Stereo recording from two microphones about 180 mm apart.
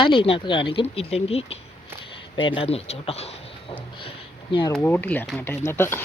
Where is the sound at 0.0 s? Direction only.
30° left (ahead or behind).